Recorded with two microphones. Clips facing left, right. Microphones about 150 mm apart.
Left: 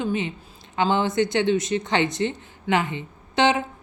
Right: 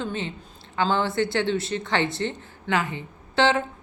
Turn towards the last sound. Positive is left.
turn(degrees=15)  # may be behind; listen again after turning